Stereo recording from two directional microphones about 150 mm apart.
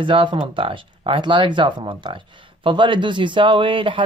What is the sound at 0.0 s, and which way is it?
Speech, 35° right (ahead or behind).